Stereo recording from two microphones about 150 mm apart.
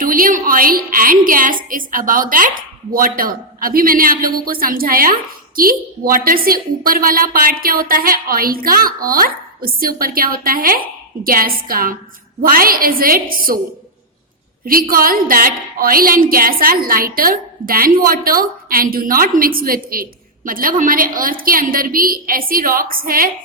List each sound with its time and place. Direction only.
0.0 s a woman's voice: 70° right (ahead or behind)
14.6 s a woman's voice: 75° right (ahead or behind)